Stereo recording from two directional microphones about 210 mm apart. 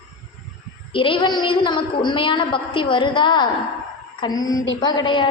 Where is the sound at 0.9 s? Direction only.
25° left (ahead or behind).